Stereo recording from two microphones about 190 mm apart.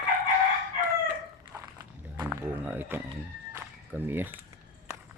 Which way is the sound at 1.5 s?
15° right (ahead or behind).